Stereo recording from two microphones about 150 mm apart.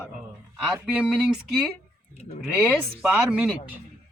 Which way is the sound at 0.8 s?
10° right (ahead or behind).